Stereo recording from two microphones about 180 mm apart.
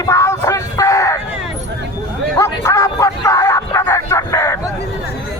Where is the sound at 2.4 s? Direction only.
20° left (ahead or behind).